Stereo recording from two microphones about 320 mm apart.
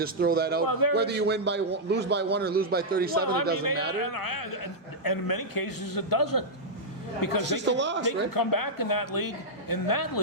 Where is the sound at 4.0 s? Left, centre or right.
Left.